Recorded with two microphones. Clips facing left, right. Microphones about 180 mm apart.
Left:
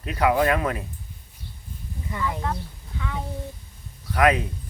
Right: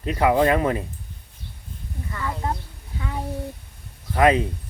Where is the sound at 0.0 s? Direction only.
25° right (ahead or behind).